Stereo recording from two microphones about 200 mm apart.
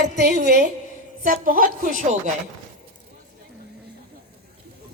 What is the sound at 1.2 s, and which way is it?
Speech, 40° right (ahead or behind).